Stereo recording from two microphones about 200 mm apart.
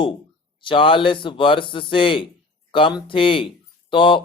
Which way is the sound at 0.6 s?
25° left (ahead or behind).